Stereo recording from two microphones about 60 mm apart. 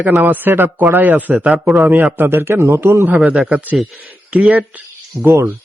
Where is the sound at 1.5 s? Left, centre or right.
Centre.